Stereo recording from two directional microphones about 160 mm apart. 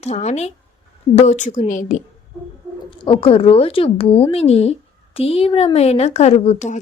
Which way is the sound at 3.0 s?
35° left (ahead or behind).